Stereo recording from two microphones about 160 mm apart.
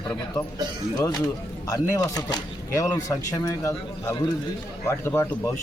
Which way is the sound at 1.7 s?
20° left (ahead or behind).